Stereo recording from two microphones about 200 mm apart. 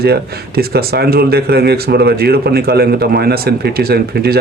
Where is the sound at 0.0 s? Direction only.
50° right (ahead or behind).